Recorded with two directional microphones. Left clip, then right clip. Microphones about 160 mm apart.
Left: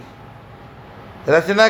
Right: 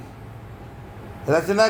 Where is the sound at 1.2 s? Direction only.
25° left (ahead or behind).